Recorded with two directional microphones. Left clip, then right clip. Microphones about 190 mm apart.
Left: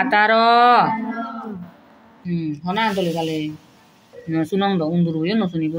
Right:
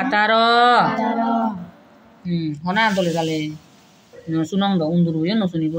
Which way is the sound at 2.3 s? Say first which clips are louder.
Right 1 dB; 5° left (ahead or behind).